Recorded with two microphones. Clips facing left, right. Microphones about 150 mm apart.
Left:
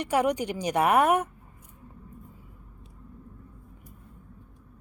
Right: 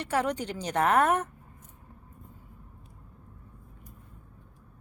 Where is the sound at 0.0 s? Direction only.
15° left (ahead or behind).